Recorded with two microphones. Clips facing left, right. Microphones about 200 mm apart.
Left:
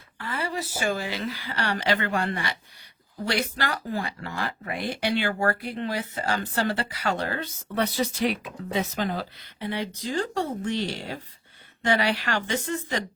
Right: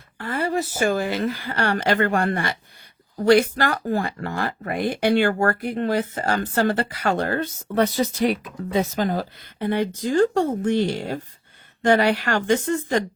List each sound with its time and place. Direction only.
0.2 s speech: 50° right (ahead or behind)